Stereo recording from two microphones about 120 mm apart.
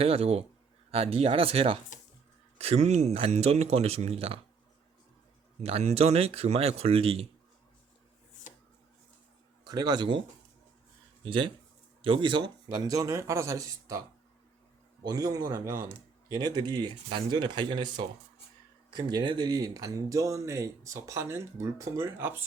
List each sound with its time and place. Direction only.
0.0 s speech: 55° right (ahead or behind)
5.6 s speech: 55° right (ahead or behind)
9.6 s speech: 35° right (ahead or behind)
15.0 s speech: 30° right (ahead or behind)
16.3 s speech: 35° right (ahead or behind); by 22.4 s 20° right (ahead or behind)